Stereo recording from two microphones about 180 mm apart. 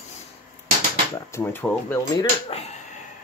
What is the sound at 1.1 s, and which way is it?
Speech, 15° left (ahead or behind).